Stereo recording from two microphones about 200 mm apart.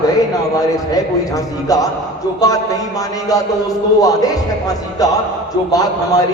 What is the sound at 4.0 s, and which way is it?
A man's voice, 15° left (ahead or behind).